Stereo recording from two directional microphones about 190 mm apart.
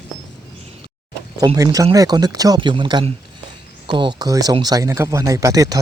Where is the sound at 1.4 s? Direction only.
20° right (ahead or behind).